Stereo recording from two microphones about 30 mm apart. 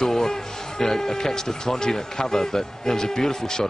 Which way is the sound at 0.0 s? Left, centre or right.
Centre.